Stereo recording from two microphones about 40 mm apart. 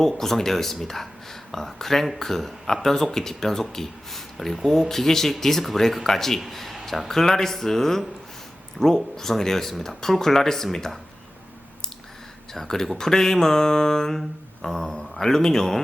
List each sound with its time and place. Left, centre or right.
0.0 s a man's voice: centre
12.5 s speech: centre
14.2 s a sound: centre
15.2 s speech: centre